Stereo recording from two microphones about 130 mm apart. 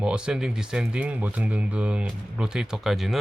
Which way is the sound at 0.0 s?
5° right (ahead or behind).